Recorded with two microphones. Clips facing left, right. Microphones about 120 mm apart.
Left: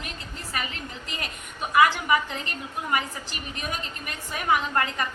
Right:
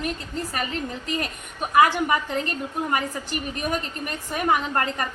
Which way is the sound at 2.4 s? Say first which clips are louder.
Right 6 dB; 40° right (ahead or behind).